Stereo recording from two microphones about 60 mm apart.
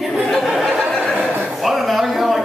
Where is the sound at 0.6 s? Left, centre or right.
Right.